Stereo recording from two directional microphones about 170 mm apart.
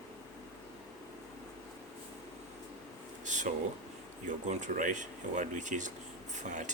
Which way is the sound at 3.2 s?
45° right (ahead or behind).